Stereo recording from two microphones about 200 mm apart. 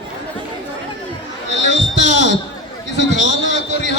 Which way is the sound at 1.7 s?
60° left (ahead or behind).